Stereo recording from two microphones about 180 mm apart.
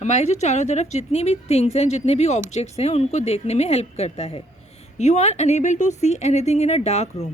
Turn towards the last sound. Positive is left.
turn(degrees=35)  # may be behind; listen again after turning